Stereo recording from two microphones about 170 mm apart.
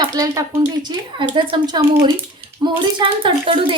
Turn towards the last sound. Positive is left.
turn(degrees=-30)  # may be behind; listen again after turning